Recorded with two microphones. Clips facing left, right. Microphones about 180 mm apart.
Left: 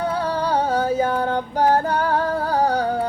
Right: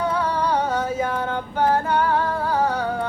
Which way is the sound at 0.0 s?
30° left (ahead or behind).